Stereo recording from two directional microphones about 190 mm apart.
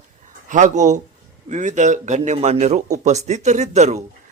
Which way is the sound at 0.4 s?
40° right (ahead or behind).